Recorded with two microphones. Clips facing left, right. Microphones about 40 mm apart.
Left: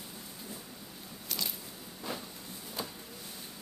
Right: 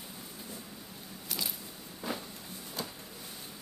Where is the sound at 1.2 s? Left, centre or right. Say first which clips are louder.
Even; centre.